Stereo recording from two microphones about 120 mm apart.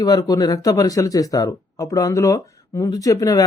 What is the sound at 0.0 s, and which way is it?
Speech, 30° left (ahead or behind).